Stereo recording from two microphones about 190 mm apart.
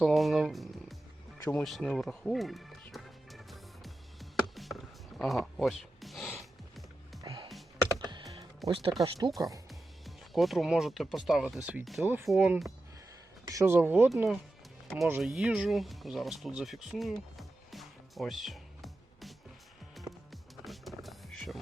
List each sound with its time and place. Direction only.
0.0 s speech: centre (ahead or behind)
1.5 s music: 5° left (ahead or behind)
7.2 s music: 20° right (ahead or behind)
7.9 s computer keyboard: 25° right (ahead or behind)
8.3 s music: 25° right (ahead or behind)
9.0 s speech: 25° right (ahead or behind)
9.6 s speech: centre (ahead or behind)
13.5 s speech: 15° right (ahead or behind)
20.0 s music: centre (ahead or behind)